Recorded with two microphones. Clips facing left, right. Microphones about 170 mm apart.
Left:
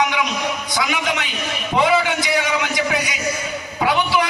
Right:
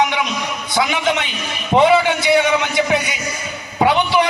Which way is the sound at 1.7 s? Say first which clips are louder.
Right 5 dB; 25° right (ahead or behind).